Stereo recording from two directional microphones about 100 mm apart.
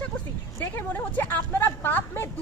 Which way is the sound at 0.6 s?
20° left (ahead or behind).